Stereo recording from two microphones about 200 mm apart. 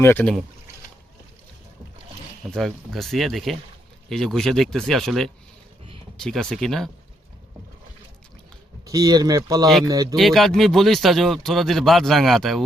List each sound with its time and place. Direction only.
0.0 s speech: 10° left (ahead or behind)
2.5 s speech: centre (ahead or behind)
8.9 s speech: 20° right (ahead or behind)
10.2 s speech: centre (ahead or behind)